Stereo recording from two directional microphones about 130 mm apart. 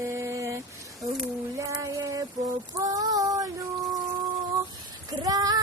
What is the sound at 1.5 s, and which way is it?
Female singing, 25° right (ahead or behind).